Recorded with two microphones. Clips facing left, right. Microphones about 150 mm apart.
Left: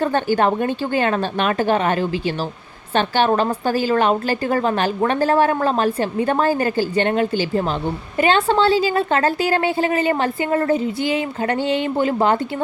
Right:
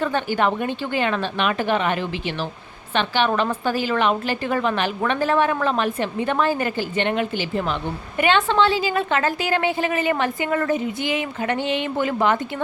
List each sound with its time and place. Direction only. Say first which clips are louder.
0.0 s a woman's voice: left 4 dB; 40° left (ahead or behind)
11.8 s a woman's voice: left 3 dB; 30° left (ahead or behind)